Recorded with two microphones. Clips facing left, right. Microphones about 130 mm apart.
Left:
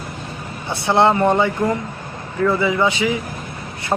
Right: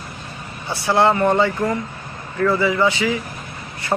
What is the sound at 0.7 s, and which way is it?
A man's voice, 20° left (ahead or behind).